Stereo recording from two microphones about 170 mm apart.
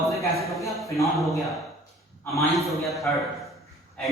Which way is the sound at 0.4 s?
20° left (ahead or behind).